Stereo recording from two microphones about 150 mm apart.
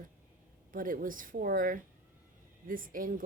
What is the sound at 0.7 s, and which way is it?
Speech, 65° right (ahead or behind).